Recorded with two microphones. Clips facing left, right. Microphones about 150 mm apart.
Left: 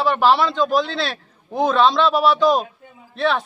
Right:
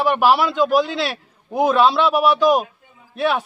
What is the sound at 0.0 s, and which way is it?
Speech, 15° right (ahead or behind).